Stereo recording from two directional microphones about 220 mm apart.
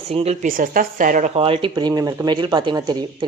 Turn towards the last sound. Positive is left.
turn(degrees=-20)  # may be behind; listen again after turning